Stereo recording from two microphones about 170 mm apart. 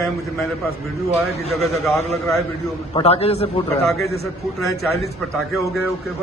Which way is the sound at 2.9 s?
35° left (ahead or behind).